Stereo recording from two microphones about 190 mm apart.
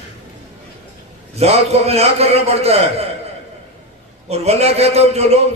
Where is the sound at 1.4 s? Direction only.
35° right (ahead or behind).